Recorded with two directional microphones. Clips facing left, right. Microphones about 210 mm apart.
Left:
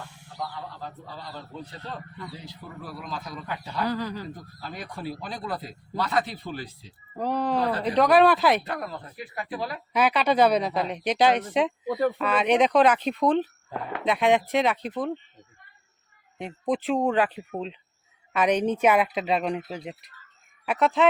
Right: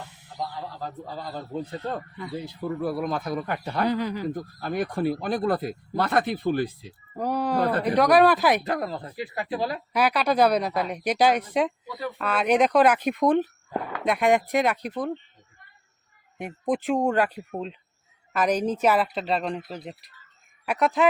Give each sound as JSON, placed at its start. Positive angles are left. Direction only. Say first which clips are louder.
{"t": 0.4, "sound": "a sound", "louder": "right 2 dB", "side_deg": -25}
{"t": 0.8, "sound": "speech", "louder": "right 5 dB", "side_deg": -45}
{"t": 3.8, "sound": "speech", "louder": "right 4 dB", "side_deg": -20}
{"t": 4.4, "sound": "speech", "louder": "right 11 dB", "side_deg": -55}
{"t": 7.2, "sound": "speech", "louder": "even", "side_deg": -5}
{"t": 7.6, "sound": "speech", "louder": "right 2 dB", "side_deg": -55}
{"t": 8.0, "sound": "speech", "louder": "even", "side_deg": -5}
{"t": 9.3, "sound": "speech", "louder": "right 4 dB", "side_deg": -30}
{"t": 9.9, "sound": "a woman's voice", "louder": "left 1 dB", "side_deg": -5}
{"t": 11.9, "sound": "speech", "louder": "left 9 dB", "side_deg": 55}
{"t": 12.2, "sound": "speech", "louder": "right 3 dB", "side_deg": -5}
{"t": 14.1, "sound": "a woman's voice", "louder": "even", "side_deg": 0}
{"t": 16.4, "sound": "speech", "louder": "right 1 dB", "side_deg": -15}
{"t": 17.5, "sound": "a woman's voice", "louder": "even", "side_deg": 0}